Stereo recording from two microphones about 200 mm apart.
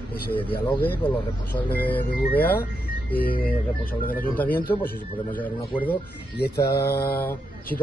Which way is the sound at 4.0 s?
45° left (ahead or behind).